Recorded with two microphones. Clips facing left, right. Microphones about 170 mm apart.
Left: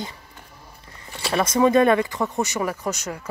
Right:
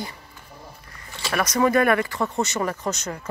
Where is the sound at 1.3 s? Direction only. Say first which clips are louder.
Left 2 dB; 25° left (ahead or behind).